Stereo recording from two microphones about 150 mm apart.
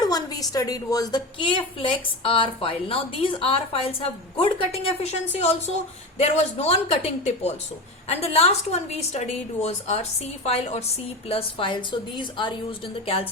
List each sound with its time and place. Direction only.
0.0 s a woman's voice: 25° left (ahead or behind)